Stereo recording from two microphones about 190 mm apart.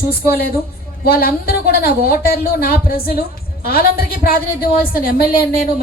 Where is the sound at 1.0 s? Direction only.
55° left (ahead or behind).